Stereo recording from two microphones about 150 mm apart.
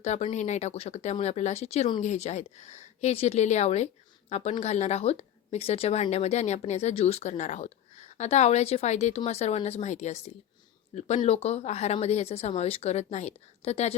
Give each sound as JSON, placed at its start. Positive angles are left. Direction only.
{"t": 0.0, "sound": "speech", "side_deg": 45}